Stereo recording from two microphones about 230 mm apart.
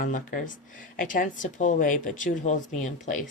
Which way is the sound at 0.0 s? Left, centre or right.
Left.